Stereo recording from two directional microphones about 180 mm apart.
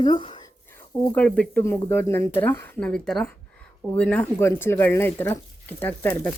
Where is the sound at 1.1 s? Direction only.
5° left (ahead or behind).